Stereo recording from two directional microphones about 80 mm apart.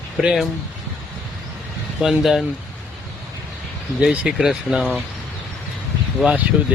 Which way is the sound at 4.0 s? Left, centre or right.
Centre.